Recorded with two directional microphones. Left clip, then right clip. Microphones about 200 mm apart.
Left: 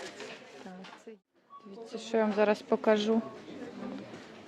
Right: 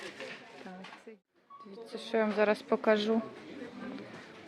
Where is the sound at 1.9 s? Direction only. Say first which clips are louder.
Left 1 dB; 10° left (ahead or behind).